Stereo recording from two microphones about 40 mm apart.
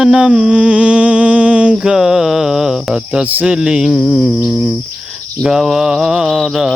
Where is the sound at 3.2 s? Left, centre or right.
Right.